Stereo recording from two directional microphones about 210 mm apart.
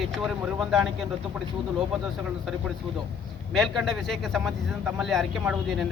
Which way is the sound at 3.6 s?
Centre (ahead or behind).